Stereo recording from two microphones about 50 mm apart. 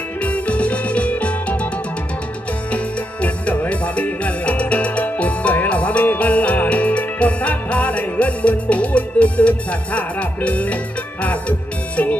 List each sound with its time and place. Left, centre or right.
0.2 s music: left
2.7 s music: left